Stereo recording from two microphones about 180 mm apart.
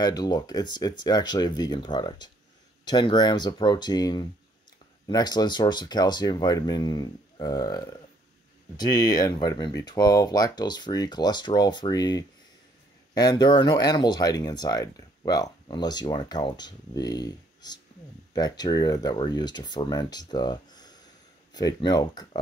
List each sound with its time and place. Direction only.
0.0 s speech: 20° left (ahead or behind)